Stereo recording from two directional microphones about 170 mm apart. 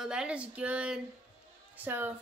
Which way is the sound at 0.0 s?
5° right (ahead or behind).